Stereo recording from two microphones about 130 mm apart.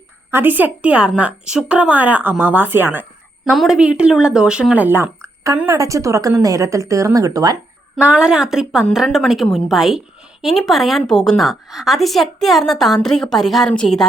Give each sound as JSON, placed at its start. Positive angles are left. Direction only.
{"t": 0.3, "sound": "a woman's voice", "side_deg": -15}
{"t": 3.5, "sound": "a woman's voice", "side_deg": 0}
{"t": 7.9, "sound": "a woman's voice", "side_deg": -10}